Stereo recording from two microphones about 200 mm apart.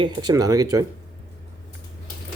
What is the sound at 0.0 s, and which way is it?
Speech, 20° right (ahead or behind).